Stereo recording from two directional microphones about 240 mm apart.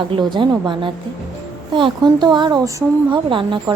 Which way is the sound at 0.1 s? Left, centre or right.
Centre.